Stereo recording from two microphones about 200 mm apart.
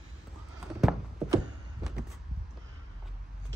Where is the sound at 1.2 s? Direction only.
Centre (ahead or behind).